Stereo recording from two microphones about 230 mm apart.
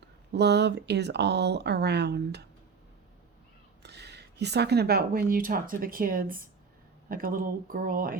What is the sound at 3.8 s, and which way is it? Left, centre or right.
Speech, right.